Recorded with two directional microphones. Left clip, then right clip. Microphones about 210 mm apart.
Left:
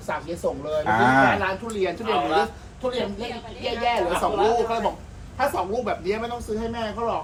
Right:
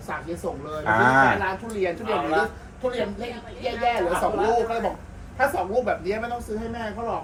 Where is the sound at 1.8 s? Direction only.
Centre (ahead or behind).